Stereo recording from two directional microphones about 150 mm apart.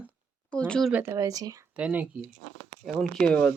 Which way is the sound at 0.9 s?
15° right (ahead or behind).